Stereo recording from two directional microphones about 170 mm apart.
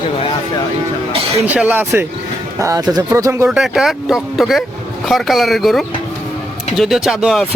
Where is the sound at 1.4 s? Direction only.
10° right (ahead or behind).